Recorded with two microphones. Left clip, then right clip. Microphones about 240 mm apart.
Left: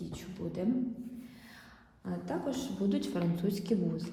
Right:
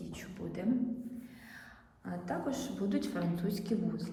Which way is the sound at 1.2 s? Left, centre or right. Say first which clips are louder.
Right 1 dB; left.